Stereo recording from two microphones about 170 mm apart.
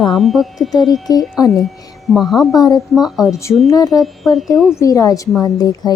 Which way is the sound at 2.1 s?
Centre (ahead or behind).